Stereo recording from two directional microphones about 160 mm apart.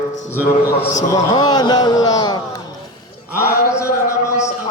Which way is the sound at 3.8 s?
20° left (ahead or behind).